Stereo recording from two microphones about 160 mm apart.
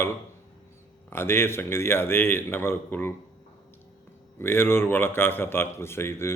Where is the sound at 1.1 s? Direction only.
15° left (ahead or behind).